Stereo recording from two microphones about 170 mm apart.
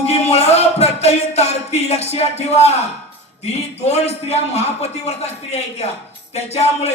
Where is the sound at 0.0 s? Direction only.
40° left (ahead or behind).